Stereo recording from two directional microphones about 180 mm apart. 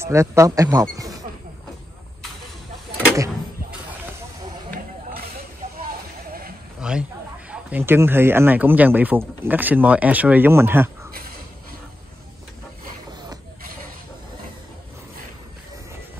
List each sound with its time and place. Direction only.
0.0 s speech: 15° right (ahead or behind)
6.8 s a sound: 5° right (ahead or behind)
7.7 s speech: 10° right (ahead or behind)